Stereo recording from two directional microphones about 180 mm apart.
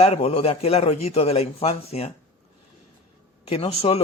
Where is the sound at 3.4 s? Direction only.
35° left (ahead or behind).